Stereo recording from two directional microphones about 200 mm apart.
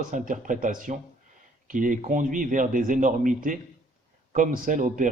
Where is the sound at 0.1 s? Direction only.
40° right (ahead or behind).